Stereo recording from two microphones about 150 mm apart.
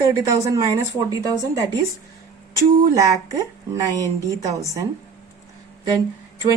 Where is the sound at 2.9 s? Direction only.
20° right (ahead or behind).